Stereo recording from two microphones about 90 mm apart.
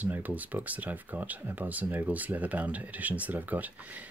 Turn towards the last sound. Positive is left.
turn(degrees=-15)  # may be behind; listen again after turning